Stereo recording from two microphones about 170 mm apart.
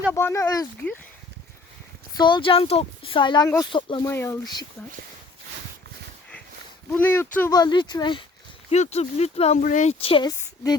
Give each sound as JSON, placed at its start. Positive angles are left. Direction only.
{"t": 0.1, "sound": "speech", "side_deg": 15}
{"t": 2.1, "sound": "speech", "side_deg": 25}
{"t": 4.0, "sound": "speech", "side_deg": 15}
{"t": 6.9, "sound": "speech", "side_deg": 10}
{"t": 7.6, "sound": "speech", "side_deg": 25}
{"t": 8.7, "sound": "speech", "side_deg": 40}
{"t": 9.6, "sound": "speech", "side_deg": 50}
{"t": 10.0, "sound": "speech", "side_deg": 35}
{"t": 10.2, "sound": "a woman's voice", "side_deg": 20}